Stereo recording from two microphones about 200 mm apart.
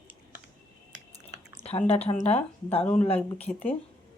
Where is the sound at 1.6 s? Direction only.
30° left (ahead or behind).